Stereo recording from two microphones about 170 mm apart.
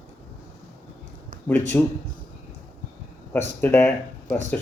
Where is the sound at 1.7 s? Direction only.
15° left (ahead or behind).